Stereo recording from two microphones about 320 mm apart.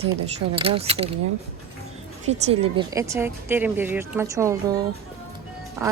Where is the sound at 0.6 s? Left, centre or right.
Centre.